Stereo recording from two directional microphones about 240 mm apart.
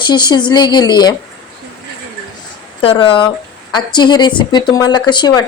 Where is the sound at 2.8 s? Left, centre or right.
Left.